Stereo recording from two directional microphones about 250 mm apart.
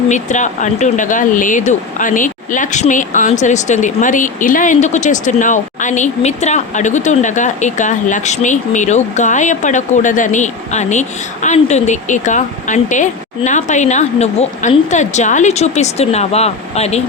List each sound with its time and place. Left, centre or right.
0.1 s speech: left